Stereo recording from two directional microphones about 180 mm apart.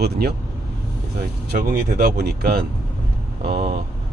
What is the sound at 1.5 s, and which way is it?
Speech, 55° right (ahead or behind).